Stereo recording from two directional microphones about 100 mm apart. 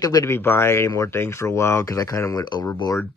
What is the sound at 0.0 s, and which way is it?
Speech, 40° left (ahead or behind).